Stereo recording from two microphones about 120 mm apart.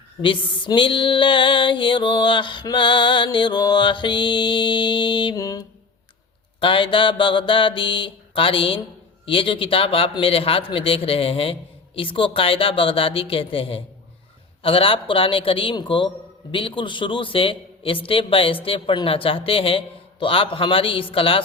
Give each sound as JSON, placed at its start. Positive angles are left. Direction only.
{"t": 0.2, "sound": "a man's voice", "side_deg": 45}
{"t": 3.3, "sound": "mantra", "side_deg": 40}
{"t": 5.4, "sound": "mantra", "side_deg": 30}
{"t": 6.6, "sound": "a man's voice", "side_deg": 45}